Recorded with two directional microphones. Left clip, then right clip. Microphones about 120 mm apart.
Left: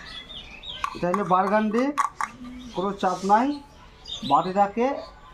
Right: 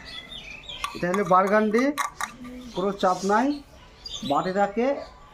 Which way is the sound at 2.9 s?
25° left (ahead or behind).